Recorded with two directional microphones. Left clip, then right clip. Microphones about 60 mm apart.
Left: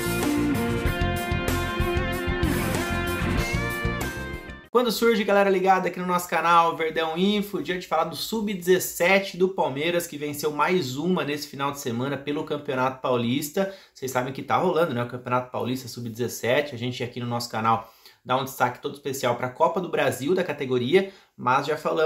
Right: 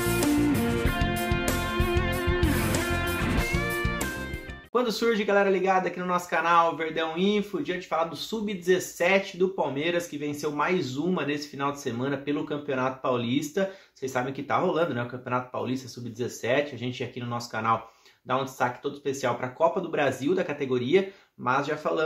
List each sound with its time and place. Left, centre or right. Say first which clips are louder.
0.0 s music: even; centre
4.7 s speech: left 4 dB; left